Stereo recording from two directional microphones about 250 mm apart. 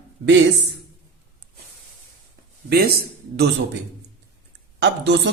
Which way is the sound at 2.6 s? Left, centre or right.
Right.